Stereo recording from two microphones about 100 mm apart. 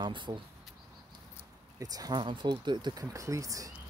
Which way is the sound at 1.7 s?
40° right (ahead or behind).